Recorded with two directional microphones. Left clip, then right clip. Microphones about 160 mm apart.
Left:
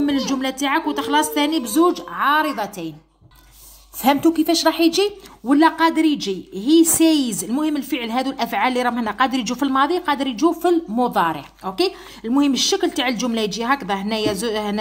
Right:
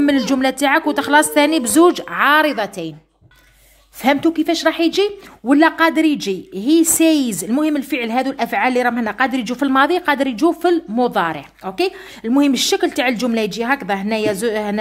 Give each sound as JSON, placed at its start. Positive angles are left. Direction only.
{"t": 0.0, "sound": "speech", "side_deg": -55}
{"t": 2.4, "sound": "a woman's voice", "side_deg": -35}
{"t": 4.0, "sound": "a woman's voice", "side_deg": -15}
{"t": 5.5, "sound": "a woman's voice", "side_deg": -35}
{"t": 9.7, "sound": "a woman's voice", "side_deg": -40}
{"t": 10.6, "sound": "a woman's voice", "side_deg": -20}